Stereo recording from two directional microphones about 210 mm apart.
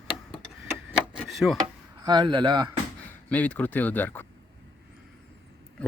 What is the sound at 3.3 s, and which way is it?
Speech, 5° left (ahead or behind).